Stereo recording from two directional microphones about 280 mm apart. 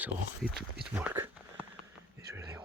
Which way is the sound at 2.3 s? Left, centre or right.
Centre.